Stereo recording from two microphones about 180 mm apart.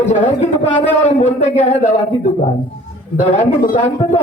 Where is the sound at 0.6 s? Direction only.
35° left (ahead or behind).